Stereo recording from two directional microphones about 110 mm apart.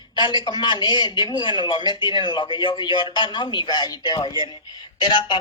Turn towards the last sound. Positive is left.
turn(degrees=40)  # may be behind; listen again after turning